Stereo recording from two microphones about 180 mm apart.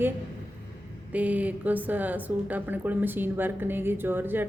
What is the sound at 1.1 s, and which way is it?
A woman's voice, 10° right (ahead or behind).